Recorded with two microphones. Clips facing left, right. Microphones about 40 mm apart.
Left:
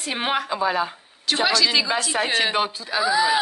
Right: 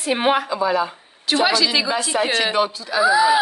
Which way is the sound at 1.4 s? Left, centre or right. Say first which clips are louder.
Even; centre.